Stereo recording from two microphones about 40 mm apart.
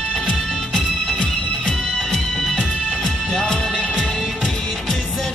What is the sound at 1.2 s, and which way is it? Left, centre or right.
Music, left.